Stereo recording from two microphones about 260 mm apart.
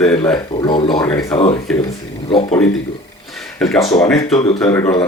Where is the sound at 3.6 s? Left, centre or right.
Centre.